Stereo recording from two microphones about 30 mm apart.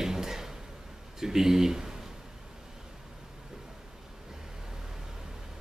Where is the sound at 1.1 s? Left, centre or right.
Centre.